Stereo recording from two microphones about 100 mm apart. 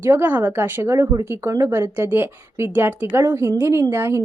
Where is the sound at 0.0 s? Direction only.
20° right (ahead or behind).